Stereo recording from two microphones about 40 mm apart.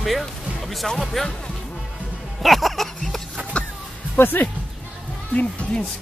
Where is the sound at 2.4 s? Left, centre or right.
Centre.